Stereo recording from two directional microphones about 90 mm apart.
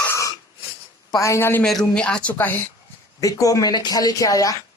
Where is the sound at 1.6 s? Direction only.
10° left (ahead or behind).